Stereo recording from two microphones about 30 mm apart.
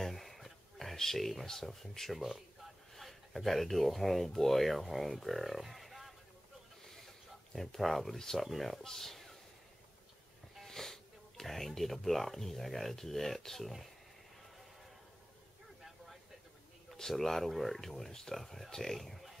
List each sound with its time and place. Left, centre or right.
0.0 s a sound: centre
1.4 s speech: centre
2.1 s speech: centre
7.5 s speech: centre
10.7 s speech: centre
17.1 s speech: centre
17.5 s speech: centre
18.1 s speech: centre
18.4 s speech: centre